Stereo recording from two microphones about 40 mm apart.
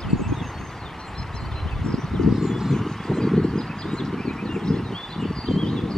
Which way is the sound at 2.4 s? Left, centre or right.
Centre.